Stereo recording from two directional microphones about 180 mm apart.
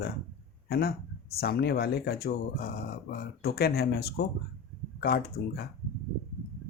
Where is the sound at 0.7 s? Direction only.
60° left (ahead or behind).